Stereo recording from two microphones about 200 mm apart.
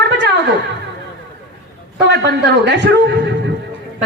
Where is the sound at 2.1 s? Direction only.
60° right (ahead or behind).